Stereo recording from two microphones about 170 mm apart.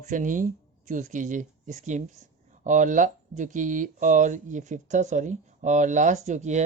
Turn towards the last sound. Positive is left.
turn(degrees=-45)  # may be behind; listen again after turning